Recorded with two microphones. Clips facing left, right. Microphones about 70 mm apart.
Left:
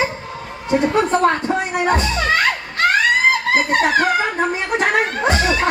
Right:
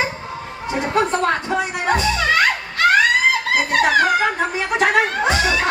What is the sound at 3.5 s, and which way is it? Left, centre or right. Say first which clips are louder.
Speech: even; left.